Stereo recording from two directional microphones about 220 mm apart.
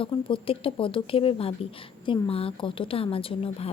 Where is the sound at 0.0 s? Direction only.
25° left (ahead or behind).